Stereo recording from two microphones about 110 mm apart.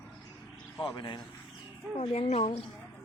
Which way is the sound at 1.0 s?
45° left (ahead or behind).